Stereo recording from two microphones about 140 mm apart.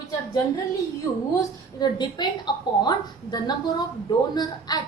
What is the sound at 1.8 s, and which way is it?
A woman's voice, 30° left (ahead or behind).